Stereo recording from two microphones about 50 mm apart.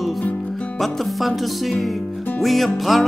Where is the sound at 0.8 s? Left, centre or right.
Centre.